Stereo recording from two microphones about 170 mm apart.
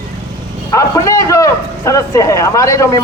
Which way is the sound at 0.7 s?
20° left (ahead or behind).